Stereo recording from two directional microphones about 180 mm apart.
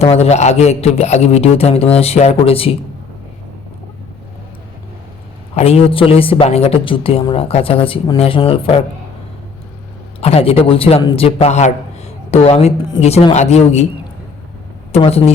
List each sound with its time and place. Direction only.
0.0 s speech: 35° left (ahead or behind)
5.5 s speech: 35° left (ahead or behind)
10.2 s a man's voice: 35° left (ahead or behind)
14.9 s speech: 35° left (ahead or behind)